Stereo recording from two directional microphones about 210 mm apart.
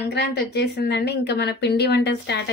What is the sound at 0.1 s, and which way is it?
A woman's voice, 55° left (ahead or behind).